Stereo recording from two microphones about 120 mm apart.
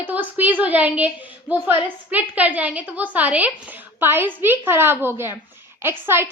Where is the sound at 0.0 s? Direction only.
15° right (ahead or behind).